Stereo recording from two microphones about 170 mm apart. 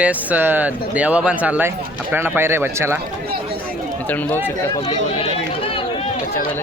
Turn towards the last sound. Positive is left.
turn(degrees=35)  # may be behind; listen again after turning